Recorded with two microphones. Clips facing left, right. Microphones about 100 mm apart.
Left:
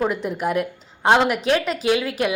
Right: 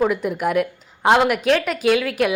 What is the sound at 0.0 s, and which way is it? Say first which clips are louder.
A woman's voice: right 3 dB; 5° right (ahead or behind).